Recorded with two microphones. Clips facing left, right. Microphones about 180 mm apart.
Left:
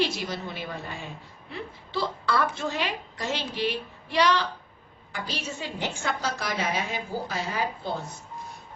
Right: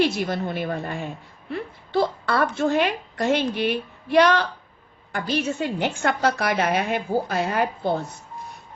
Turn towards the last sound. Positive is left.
turn(degrees=-60)  # may be behind; listen again after turning